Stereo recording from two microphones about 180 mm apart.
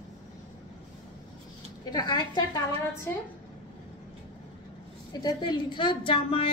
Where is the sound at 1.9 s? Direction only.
20° left (ahead or behind).